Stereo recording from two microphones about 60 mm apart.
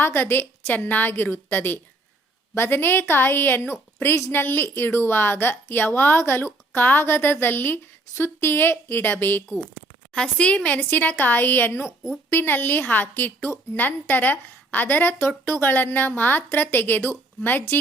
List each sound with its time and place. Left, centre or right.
0.0 s a woman's voice: left
10.2 s a woman's voice: centre; by 17.7 s left